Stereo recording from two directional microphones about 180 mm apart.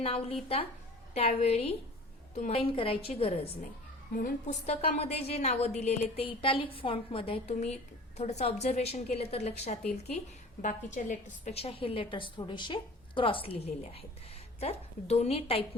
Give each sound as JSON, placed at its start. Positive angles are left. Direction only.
{"t": 0.0, "sound": "a woman's voice", "side_deg": 35}
{"t": 4.1, "sound": "a woman's voice", "side_deg": 50}
{"t": 4.6, "sound": "a woman's voice", "side_deg": 35}